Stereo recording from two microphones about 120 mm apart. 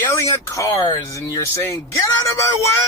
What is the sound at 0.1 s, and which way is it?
Speech, 25° left (ahead or behind).